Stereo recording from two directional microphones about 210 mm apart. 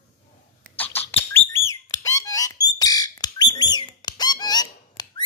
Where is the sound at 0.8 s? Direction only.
10° left (ahead or behind).